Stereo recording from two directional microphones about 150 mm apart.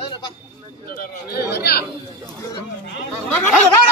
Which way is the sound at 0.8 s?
90° left.